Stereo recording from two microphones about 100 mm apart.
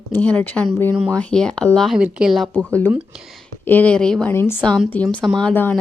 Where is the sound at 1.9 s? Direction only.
5° right (ahead or behind).